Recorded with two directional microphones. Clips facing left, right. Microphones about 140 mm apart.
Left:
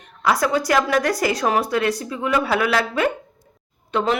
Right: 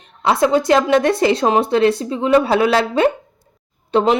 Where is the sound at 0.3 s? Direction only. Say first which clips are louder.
Right 5 dB; 25° right (ahead or behind).